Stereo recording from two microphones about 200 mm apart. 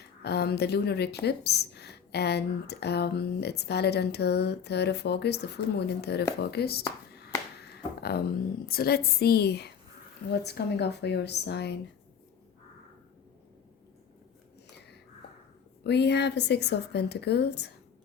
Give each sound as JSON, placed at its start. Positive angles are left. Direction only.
{"t": 0.2, "sound": "a woman's voice", "side_deg": 55}
{"t": 8.6, "sound": "a woman's voice", "side_deg": 50}
{"t": 15.8, "sound": "a woman's voice", "side_deg": 55}